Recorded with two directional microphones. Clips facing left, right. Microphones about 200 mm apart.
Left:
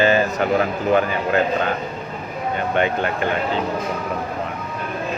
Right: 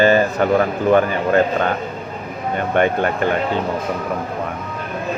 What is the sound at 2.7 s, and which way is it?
Speech, 45° right (ahead or behind).